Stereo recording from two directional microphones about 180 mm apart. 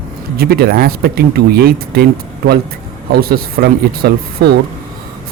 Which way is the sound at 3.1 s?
55° right (ahead or behind).